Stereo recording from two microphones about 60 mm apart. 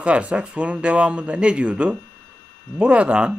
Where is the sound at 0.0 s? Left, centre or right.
Centre.